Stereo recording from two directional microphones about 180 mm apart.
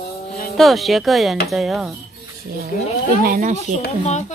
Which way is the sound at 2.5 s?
60° right (ahead or behind).